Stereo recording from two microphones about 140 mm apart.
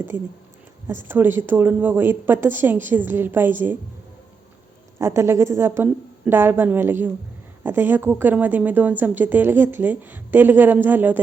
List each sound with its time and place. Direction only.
0.9 s speech: 15° right (ahead or behind)
4.9 s speech: 20° right (ahead or behind)